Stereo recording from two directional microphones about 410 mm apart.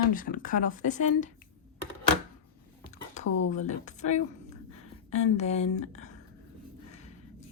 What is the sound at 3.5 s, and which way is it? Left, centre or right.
Speech, centre.